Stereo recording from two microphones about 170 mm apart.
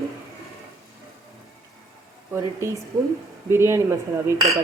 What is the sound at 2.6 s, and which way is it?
A woman's voice, 15° right (ahead or behind).